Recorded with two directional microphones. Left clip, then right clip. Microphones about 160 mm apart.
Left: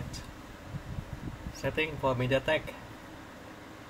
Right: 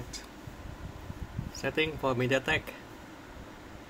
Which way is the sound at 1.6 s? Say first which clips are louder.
Even; 30° right (ahead or behind).